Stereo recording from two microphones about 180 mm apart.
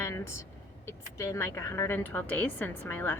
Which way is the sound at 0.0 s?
15° left (ahead or behind).